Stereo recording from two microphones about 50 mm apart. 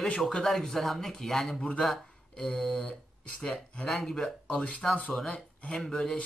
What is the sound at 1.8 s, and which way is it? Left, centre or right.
Speech, centre.